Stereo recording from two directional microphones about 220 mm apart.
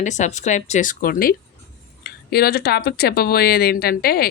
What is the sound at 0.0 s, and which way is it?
Speech, 35° left (ahead or behind).